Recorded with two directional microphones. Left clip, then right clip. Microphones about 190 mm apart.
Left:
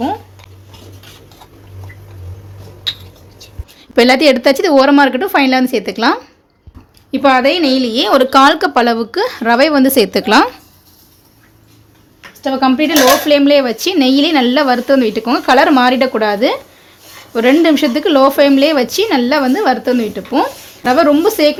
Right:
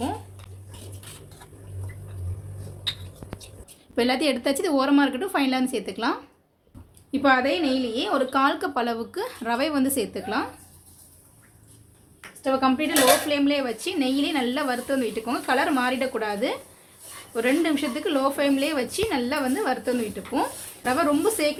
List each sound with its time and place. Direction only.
3.9 s a woman's voice: 35° left (ahead or behind)
7.4 s speech: 45° left (ahead or behind)
12.4 s speech: 45° left (ahead or behind)